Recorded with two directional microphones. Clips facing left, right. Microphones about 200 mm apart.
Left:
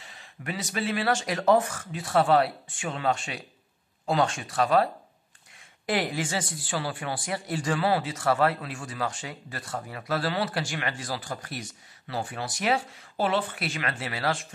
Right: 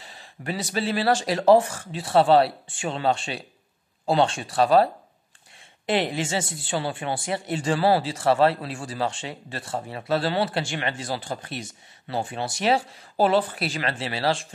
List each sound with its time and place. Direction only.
0.0 s speech: 35° right (ahead or behind)
5.9 s speech: 25° right (ahead or behind)